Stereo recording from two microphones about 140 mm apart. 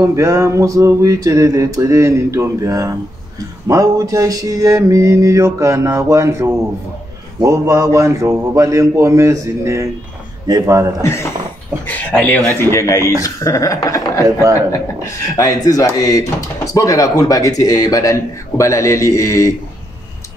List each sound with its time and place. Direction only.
0.0 s a sound: 20° right (ahead or behind)
11.0 s speech: 20° left (ahead or behind)
15.3 s speech: 25° left (ahead or behind)